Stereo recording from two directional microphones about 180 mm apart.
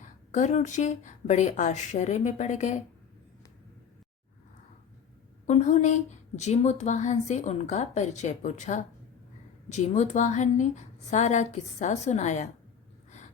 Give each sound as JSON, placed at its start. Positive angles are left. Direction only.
{"t": 0.0, "sound": "a woman's voice", "side_deg": 45}
{"t": 5.5, "sound": "a woman's voice", "side_deg": 40}